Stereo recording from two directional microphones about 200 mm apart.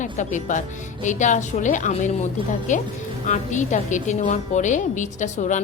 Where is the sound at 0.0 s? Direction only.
40° left (ahead or behind).